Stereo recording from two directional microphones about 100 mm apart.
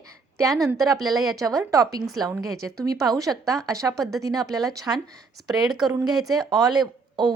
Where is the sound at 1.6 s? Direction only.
35° right (ahead or behind).